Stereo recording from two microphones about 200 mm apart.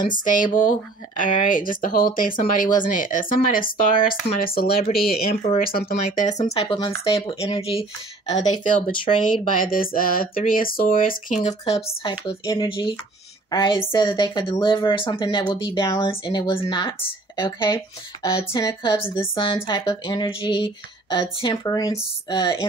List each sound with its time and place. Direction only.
0.1 s a woman's voice: 40° left (ahead or behind); by 22.7 s 20° left (ahead or behind)